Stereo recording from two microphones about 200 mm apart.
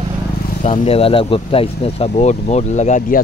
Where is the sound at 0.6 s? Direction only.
35° left (ahead or behind).